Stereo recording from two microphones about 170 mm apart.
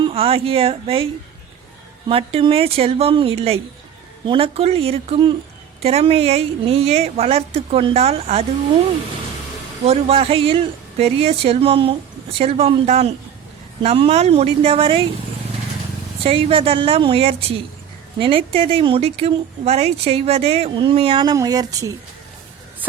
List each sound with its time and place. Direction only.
0.0 s speech: 35° right (ahead or behind)
2.0 s speech: 35° right (ahead or behind)
9.8 s speech: 35° right (ahead or behind)
16.2 s speech: 35° right (ahead or behind)